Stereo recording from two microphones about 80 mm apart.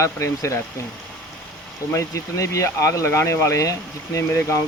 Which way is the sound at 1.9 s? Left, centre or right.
Left.